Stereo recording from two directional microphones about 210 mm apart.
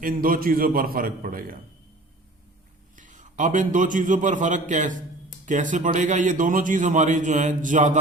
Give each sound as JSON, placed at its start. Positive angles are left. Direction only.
{"t": 0.0, "sound": "a man's voice", "side_deg": -40}
{"t": 2.9, "sound": "a man's voice", "side_deg": -35}